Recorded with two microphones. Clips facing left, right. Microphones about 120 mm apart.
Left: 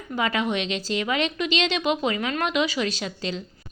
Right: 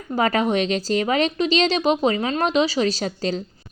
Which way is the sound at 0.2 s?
40° right (ahead or behind).